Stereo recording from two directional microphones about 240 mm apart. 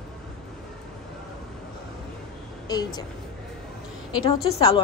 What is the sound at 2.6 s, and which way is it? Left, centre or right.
Speech, centre.